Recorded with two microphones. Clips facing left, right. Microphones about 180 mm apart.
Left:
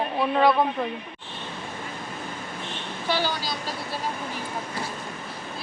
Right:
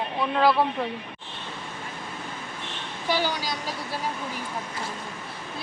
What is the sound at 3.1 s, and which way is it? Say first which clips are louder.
Speech: even; 15° right (ahead or behind).